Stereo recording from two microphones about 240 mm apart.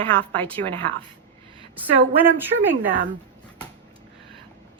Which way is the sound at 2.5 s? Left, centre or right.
Right.